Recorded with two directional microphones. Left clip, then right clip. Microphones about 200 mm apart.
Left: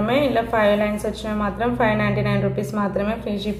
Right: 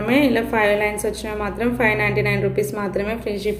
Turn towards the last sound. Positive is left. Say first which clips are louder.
# right 1 dB
turn(degrees=-35)  # may be behind; listen again after turning